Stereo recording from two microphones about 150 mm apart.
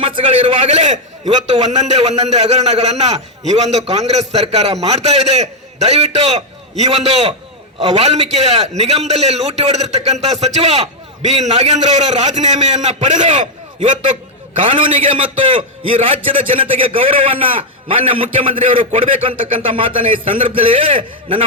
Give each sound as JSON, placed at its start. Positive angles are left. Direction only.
{"t": 0.0, "sound": "a man's voice", "side_deg": -35}
{"t": 0.8, "sound": "a man's voice", "side_deg": -55}
{"t": 15.1, "sound": "a man's voice", "side_deg": -35}